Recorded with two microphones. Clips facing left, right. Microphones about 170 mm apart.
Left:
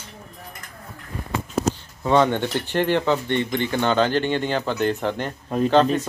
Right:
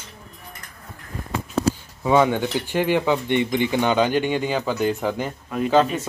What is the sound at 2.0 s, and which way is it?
Speech, 10° right (ahead or behind).